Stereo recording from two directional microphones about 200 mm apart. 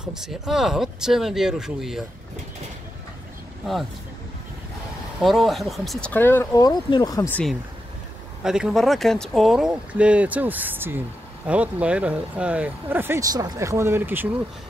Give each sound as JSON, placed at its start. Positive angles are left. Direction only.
{"t": 0.0, "sound": "speech", "side_deg": 0}
{"t": 5.2, "sound": "speech", "side_deg": 0}
{"t": 8.5, "sound": "speech", "side_deg": -5}